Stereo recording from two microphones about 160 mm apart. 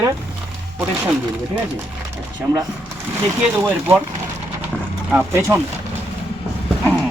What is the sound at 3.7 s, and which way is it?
Speech, 10° right (ahead or behind).